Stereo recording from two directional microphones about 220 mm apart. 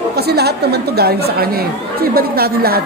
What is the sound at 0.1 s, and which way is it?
A woman's voice, 45° right (ahead or behind).